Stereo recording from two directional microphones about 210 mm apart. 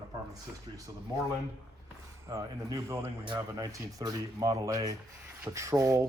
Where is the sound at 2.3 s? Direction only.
15° right (ahead or behind).